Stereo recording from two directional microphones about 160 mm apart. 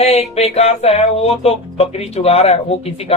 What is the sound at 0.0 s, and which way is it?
Music, 40° left (ahead or behind).